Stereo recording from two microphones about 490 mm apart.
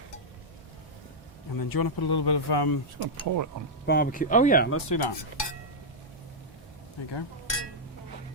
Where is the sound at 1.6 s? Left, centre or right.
Left.